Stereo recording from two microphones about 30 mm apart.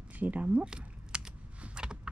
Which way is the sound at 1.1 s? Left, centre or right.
Right.